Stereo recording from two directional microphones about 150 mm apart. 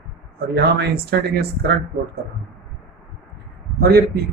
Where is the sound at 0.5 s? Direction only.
90° right.